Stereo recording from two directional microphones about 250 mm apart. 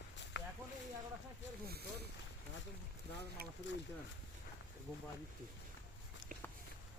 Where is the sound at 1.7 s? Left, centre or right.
Right.